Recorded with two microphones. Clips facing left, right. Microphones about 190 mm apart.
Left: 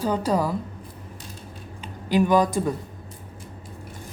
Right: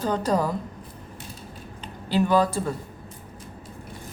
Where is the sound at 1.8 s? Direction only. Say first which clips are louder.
Left 2 dB; 15° left (ahead or behind).